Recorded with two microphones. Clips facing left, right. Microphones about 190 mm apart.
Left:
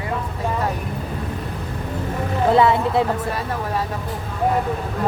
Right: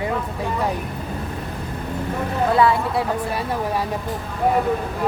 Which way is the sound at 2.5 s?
20° left (ahead or behind).